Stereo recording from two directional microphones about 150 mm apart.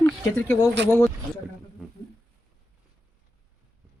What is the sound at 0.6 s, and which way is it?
Speech, 20° left (ahead or behind).